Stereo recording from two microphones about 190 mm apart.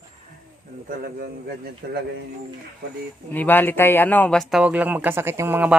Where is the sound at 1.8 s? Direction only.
55° right (ahead or behind).